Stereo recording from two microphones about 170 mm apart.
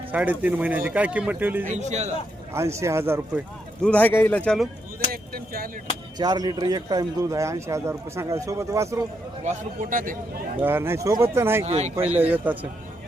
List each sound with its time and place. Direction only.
0.1 s speech: 10° right (ahead or behind)
1.7 s a man's voice: 45° right (ahead or behind)
2.5 s speech: 15° right (ahead or behind)
3.8 s a man's voice: 10° left (ahead or behind)
5.1 s speech: 60° right (ahead or behind)
6.1 s a man's voice: 25° right (ahead or behind)
9.4 s a man's voice: 45° right (ahead or behind)
10.6 s speech: 15° right (ahead or behind)
11.6 s speech: 40° right (ahead or behind)
12.2 s speech: 10° right (ahead or behind)